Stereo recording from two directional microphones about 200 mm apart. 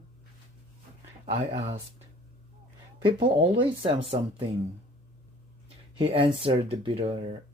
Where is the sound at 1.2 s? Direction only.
25° right (ahead or behind).